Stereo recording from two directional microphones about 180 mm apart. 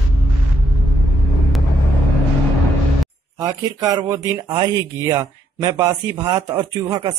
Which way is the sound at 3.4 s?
20° right (ahead or behind).